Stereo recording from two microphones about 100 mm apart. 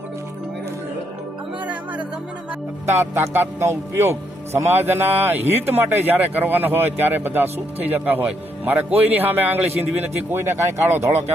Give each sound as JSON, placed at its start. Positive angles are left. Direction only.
{"t": 1.6, "sound": "music", "side_deg": -15}
{"t": 2.8, "sound": "speech", "side_deg": -20}